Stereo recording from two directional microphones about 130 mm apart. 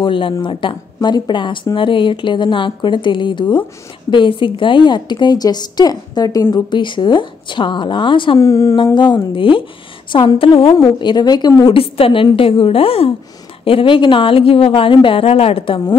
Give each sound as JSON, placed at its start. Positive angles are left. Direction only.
{"t": 0.0, "sound": "speech", "side_deg": 40}
{"t": 8.4, "sound": "speech", "side_deg": 25}
{"t": 8.9, "sound": "speech", "side_deg": 35}
{"t": 11.7, "sound": "speech", "side_deg": 45}